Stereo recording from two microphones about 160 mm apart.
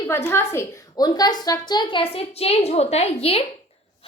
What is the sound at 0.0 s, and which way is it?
A woman's voice, 15° left (ahead or behind).